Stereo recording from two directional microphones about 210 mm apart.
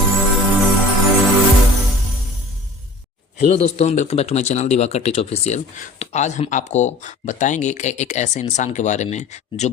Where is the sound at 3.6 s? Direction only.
30° left (ahead or behind).